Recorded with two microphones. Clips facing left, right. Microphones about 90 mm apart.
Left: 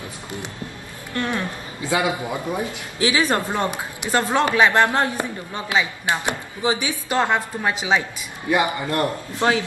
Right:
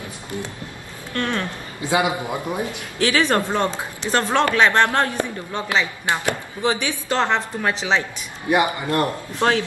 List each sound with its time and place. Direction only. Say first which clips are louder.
1.1 s speech: right 1 dB; 15° left (ahead or behind)
1.8 s a man's voice: right 1 dB; 20° right (ahead or behind)
3.0 s speech: right 1 dB; 10° left (ahead or behind)
8.5 s a man's voice: right 1 dB; 20° right (ahead or behind)